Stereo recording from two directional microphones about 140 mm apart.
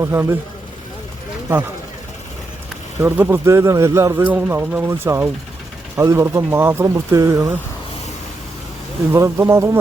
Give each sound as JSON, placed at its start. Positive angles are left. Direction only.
{"t": 0.0, "sound": "a man's voice", "side_deg": -20}
{"t": 3.0, "sound": "a man's voice", "side_deg": -15}
{"t": 9.1, "sound": "a man's voice", "side_deg": -20}